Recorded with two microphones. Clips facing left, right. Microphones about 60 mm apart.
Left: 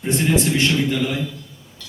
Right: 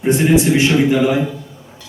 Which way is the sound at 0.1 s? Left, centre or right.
Centre.